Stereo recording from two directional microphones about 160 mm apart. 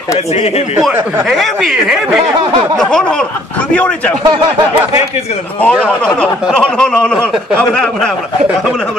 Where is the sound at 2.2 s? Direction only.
35° right (ahead or behind).